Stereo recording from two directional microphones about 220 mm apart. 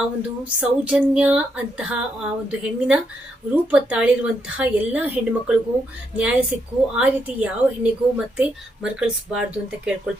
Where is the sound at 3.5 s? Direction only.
5° right (ahead or behind).